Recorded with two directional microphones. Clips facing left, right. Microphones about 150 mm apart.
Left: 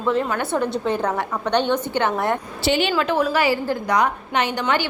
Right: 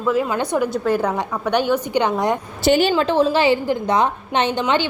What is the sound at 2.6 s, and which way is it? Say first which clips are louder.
Speech: right 5 dB; 45° right (ahead or behind).